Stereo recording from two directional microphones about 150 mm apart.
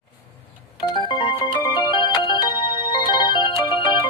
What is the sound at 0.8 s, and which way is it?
Music, 30° left (ahead or behind).